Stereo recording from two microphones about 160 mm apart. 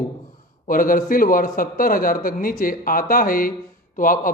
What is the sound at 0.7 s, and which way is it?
A man's voice, 60° left (ahead or behind).